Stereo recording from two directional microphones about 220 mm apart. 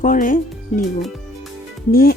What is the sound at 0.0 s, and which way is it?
Speech, 35° left (ahead or behind).